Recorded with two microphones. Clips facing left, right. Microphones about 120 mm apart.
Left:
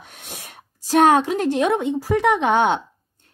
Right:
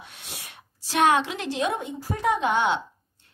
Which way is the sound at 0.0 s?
50° left (ahead or behind).